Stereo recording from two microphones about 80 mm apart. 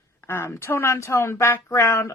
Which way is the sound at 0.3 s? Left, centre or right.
Left.